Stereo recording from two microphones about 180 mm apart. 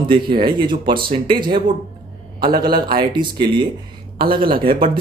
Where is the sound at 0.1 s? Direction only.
25° right (ahead or behind).